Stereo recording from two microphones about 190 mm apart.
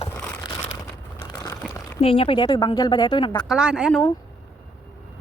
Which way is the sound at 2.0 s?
30° left (ahead or behind).